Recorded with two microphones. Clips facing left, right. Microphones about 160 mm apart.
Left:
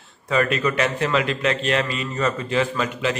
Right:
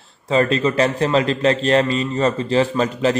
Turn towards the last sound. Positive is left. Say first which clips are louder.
# right 5 dB
turn(degrees=-35)  # may be behind; listen again after turning